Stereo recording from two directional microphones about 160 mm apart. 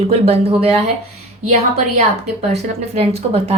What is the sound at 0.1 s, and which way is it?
Speech, 40° right (ahead or behind).